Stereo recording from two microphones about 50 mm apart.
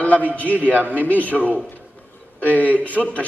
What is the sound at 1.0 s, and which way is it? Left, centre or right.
Speech, left.